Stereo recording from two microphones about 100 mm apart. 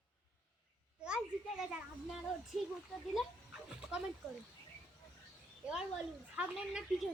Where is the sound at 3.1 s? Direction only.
10° right (ahead or behind).